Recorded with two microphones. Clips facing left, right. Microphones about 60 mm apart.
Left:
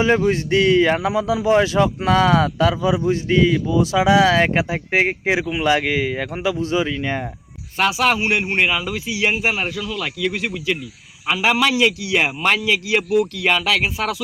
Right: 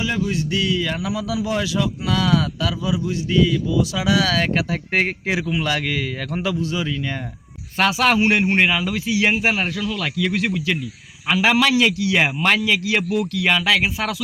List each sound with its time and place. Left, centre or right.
0.0 s a man's voice: left
4.9 s a man's voice: centre
6.6 s speech: left
6.8 s a man's voice: centre
13.3 s speech: left